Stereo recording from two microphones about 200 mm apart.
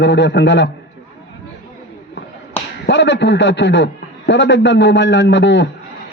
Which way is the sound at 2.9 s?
65° left (ahead or behind).